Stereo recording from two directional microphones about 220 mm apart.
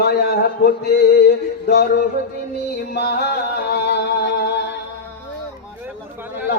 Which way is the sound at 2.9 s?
50° left (ahead or behind).